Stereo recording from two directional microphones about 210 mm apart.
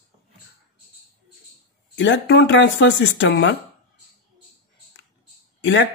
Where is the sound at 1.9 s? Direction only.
60° left (ahead or behind).